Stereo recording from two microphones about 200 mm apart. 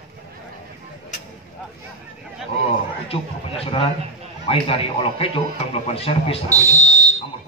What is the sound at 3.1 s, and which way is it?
Speech, 30° left (ahead or behind).